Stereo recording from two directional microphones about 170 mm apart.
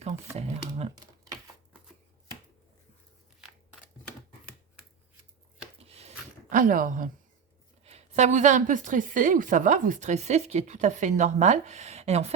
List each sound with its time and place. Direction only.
0.0 s speech: 40° right (ahead or behind)
5.8 s a sound: 35° right (ahead or behind)
7.9 s a woman's voice: 40° right (ahead or behind)